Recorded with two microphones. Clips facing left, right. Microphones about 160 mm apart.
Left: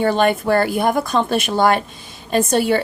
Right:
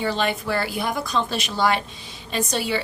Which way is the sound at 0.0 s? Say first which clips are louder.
Left 8 dB; 50° left (ahead or behind).